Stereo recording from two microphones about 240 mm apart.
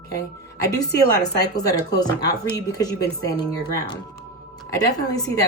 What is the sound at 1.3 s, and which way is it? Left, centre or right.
Speech, left.